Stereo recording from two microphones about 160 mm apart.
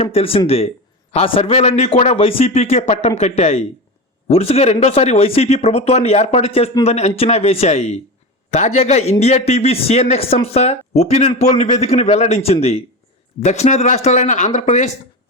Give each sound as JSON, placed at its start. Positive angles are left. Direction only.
{"t": 0.1, "sound": "a man's voice", "side_deg": 35}